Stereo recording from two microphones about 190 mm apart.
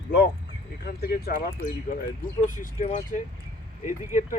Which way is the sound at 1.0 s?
55° left (ahead or behind).